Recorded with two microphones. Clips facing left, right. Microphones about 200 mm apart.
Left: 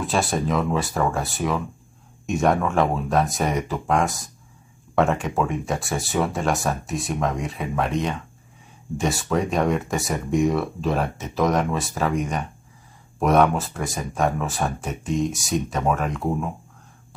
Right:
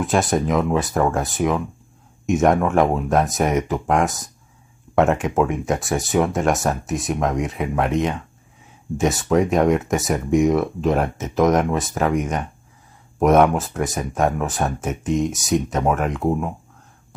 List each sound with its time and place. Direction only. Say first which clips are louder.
0.0 s speech: right 4 dB; 20° right (ahead or behind)